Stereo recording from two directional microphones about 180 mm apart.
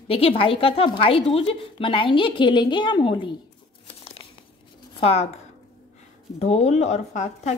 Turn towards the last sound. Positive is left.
turn(degrees=40)  # may be behind; listen again after turning